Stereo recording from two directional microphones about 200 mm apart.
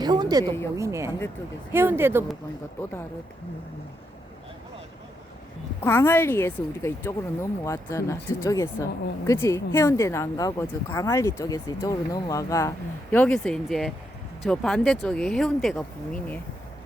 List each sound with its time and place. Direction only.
0.0 s a sound: 20° right (ahead or behind)
0.4 s speech: 10° left (ahead or behind)
0.8 s speech: 15° right (ahead or behind)
5.8 s speech: 10° left (ahead or behind)